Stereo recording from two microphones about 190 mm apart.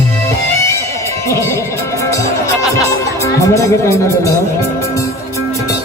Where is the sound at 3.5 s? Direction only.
15° left (ahead or behind).